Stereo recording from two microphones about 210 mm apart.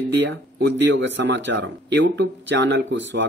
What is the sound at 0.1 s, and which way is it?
Speech, 55° right (ahead or behind).